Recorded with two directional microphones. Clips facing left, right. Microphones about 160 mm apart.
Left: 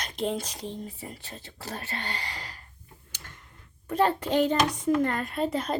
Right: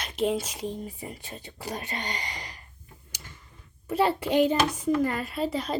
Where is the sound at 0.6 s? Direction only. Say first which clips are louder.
Right 3 dB; 10° right (ahead or behind).